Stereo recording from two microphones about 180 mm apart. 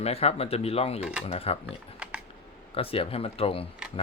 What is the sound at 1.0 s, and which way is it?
Speech, 5° right (ahead or behind).